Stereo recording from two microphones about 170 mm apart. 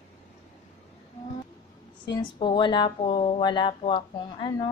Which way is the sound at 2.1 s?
30° left (ahead or behind).